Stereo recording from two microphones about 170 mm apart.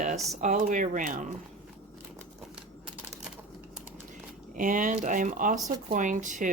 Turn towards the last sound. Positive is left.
turn(degrees=-50)  # may be behind; listen again after turning